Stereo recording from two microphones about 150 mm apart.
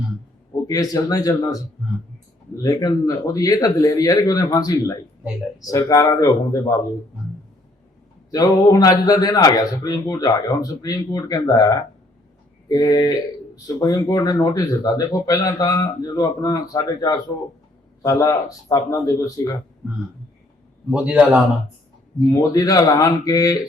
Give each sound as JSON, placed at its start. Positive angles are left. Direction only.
{"t": 0.7, "sound": "speech", "side_deg": 25}
{"t": 8.3, "sound": "speech", "side_deg": 25}
{"t": 20.9, "sound": "speech", "side_deg": -10}
{"t": 22.3, "sound": "speech", "side_deg": 25}